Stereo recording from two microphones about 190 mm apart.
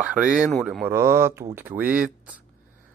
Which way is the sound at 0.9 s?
15° right (ahead or behind).